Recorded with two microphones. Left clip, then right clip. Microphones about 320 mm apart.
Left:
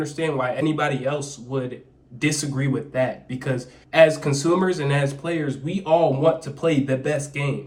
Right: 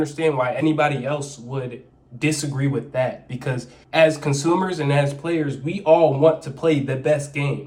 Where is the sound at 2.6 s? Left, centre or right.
Right.